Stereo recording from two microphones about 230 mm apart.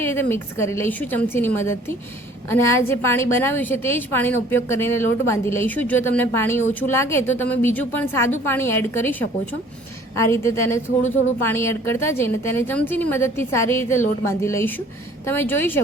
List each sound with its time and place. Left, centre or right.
0.0 s speech: centre